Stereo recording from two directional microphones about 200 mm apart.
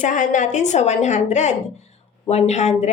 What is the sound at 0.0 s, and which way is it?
Speech, 40° left (ahead or behind).